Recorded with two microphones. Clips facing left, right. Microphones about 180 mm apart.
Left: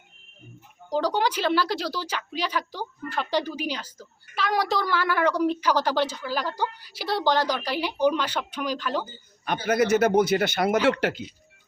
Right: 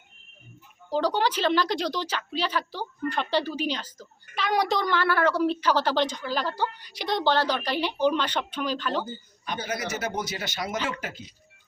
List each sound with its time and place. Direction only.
0.9 s a woman's voice: 10° left (ahead or behind)
9.4 s a man's voice: 55° left (ahead or behind)
10.8 s speech: 75° left (ahead or behind)